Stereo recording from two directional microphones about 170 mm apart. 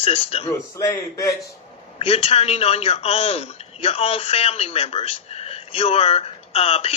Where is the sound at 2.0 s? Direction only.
35° left (ahead or behind).